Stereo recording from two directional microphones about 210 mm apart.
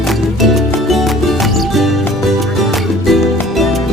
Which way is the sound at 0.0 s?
Centre (ahead or behind).